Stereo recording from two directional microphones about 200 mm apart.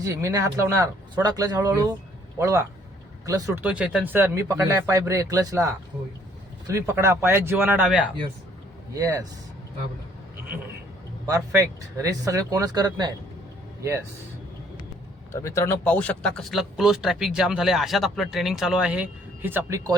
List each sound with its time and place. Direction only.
0.0 s speech: 15° right (ahead or behind)
9.0 s speech: 15° right (ahead or behind)
11.3 s speech: 15° right (ahead or behind)
15.3 s speech: 15° left (ahead or behind); by 19.8 s 10° right (ahead or behind)